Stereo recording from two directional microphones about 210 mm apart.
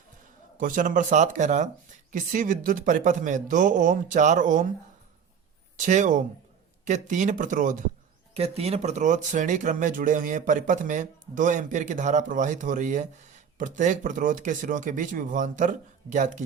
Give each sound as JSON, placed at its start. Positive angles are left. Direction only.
{"t": 0.6, "sound": "speech", "side_deg": -40}
{"t": 5.7, "sound": "speech", "side_deg": -35}